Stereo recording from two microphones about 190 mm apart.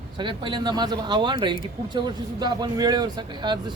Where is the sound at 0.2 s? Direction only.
25° right (ahead or behind).